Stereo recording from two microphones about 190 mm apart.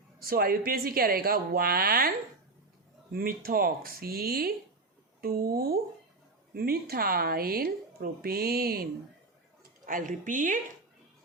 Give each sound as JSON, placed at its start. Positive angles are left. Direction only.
{"t": 0.2, "sound": "speech", "side_deg": -50}